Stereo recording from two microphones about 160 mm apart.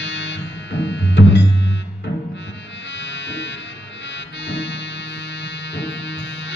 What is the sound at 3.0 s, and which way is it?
Music, 90° left.